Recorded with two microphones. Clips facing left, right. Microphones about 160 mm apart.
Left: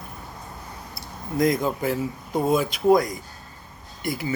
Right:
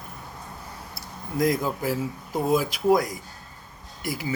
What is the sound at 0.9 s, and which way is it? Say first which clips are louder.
Speech: left 2 dB; 5° right (ahead or behind).